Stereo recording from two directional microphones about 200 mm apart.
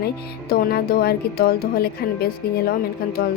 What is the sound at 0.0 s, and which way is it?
Speech, 50° left (ahead or behind).